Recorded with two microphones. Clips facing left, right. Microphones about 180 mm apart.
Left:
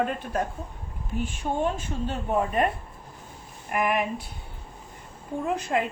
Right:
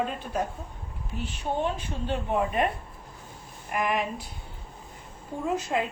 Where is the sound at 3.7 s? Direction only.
55° left (ahead or behind).